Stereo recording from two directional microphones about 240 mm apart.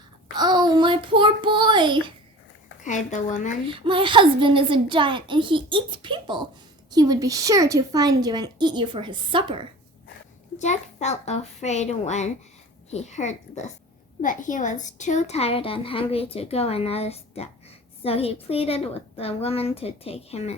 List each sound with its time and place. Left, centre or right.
0.3 s a child's voice: centre
2.8 s speech: left
3.7 s a woman's voice: right
10.6 s a woman's voice: left